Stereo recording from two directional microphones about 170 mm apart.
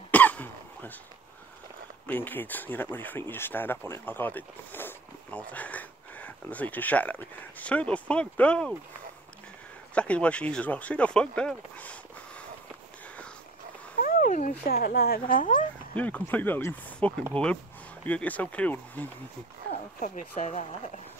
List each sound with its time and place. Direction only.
0.1 s cough: 10° left (ahead or behind)
2.0 s speech: 10° left (ahead or behind)
9.9 s speech: 5° left (ahead or behind)
14.0 s a sound: 55° left (ahead or behind)
14.7 s a woman's voice: 65° left (ahead or behind)
16.0 s speech: 10° left (ahead or behind)
19.7 s speech: 45° left (ahead or behind)